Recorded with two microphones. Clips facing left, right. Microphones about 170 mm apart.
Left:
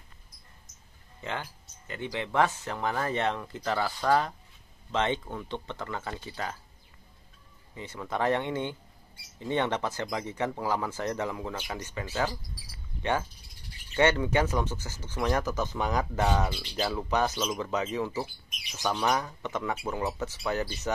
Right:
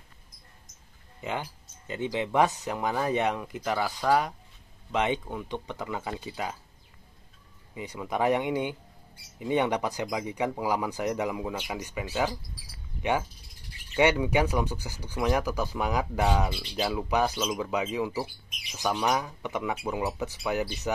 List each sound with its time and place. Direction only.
1.2 s speech: 15° right (ahead or behind)
3.9 s speech: centre (ahead or behind)
4.9 s speech: 10° right (ahead or behind)
7.7 s speech: 15° right (ahead or behind)
13.9 s speech: 15° right (ahead or behind)